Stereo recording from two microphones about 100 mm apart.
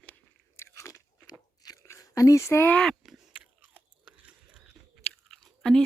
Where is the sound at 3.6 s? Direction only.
15° right (ahead or behind).